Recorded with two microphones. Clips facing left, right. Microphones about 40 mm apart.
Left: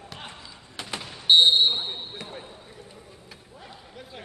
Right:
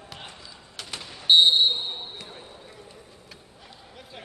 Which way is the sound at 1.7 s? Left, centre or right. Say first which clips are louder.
Left 1 dB; left.